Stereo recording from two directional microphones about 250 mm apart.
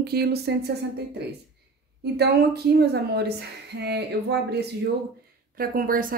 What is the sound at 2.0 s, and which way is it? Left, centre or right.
Speech, right.